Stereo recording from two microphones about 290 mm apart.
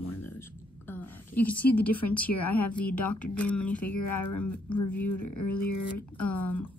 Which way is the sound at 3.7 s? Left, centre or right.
Left.